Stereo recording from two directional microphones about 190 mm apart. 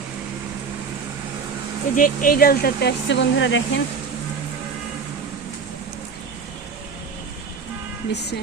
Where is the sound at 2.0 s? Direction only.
50° left (ahead or behind); by 3.8 s 70° left (ahead or behind).